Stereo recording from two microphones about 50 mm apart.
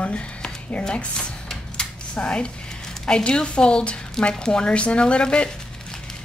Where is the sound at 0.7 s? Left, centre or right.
Centre.